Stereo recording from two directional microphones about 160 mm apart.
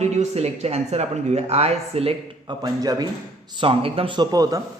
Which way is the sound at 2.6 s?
25° right (ahead or behind).